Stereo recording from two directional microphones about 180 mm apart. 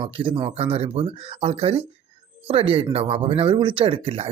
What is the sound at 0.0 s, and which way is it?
Speech, 30° right (ahead or behind).